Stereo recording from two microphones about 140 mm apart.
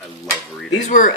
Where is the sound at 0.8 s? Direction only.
70° left (ahead or behind).